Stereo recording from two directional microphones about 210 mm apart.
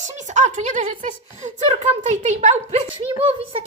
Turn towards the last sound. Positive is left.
turn(degrees=-25)  # may be behind; listen again after turning